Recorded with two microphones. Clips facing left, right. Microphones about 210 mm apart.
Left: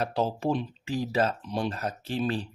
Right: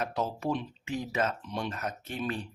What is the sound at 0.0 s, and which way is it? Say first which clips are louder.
Speech: left 4 dB; 30° left (ahead or behind).